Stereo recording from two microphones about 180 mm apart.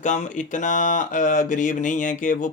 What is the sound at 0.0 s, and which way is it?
Speech, 45° left (ahead or behind).